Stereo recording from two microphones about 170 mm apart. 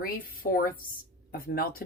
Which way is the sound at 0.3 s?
60° left (ahead or behind).